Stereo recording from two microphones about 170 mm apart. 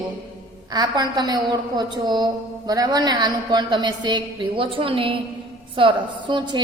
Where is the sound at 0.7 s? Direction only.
25° right (ahead or behind).